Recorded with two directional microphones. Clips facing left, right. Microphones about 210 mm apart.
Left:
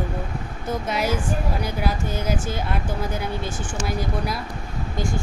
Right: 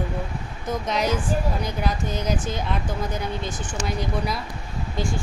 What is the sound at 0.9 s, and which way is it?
Speech, 5° left (ahead or behind).